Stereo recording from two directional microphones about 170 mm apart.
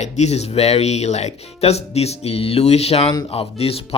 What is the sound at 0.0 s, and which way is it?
Speech, 40° left (ahead or behind).